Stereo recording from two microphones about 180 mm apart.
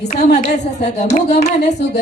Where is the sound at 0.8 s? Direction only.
40° left (ahead or behind).